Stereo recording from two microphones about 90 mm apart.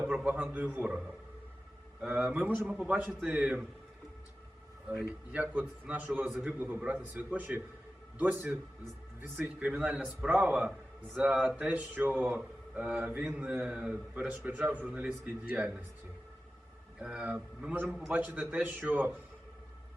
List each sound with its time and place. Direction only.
0.1 s a sound: 10° right (ahead or behind)
0.4 s a man's voice: 20° right (ahead or behind)
4.9 s a man's voice: 15° right (ahead or behind)
9.6 s a man's voice: 15° right (ahead or behind)
17.0 s a man's voice: 10° right (ahead or behind)